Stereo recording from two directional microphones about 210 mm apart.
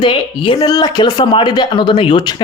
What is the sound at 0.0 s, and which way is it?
Speech, 25° left (ahead or behind).